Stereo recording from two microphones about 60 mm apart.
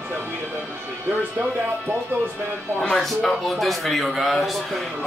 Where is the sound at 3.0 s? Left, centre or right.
Centre.